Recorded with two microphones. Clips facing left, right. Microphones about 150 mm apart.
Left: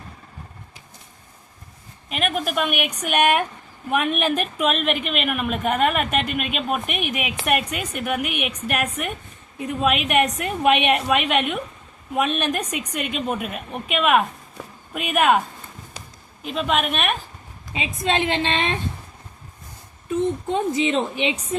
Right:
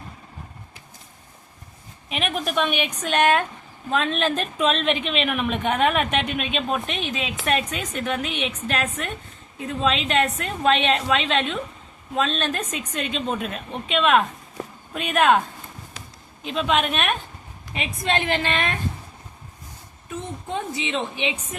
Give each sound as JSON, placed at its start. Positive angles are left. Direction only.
{"t": 2.0, "sound": "a woman's voice", "side_deg": 0}
{"t": 17.7, "sound": "a woman's voice", "side_deg": 20}
{"t": 20.5, "sound": "a woman's voice", "side_deg": 40}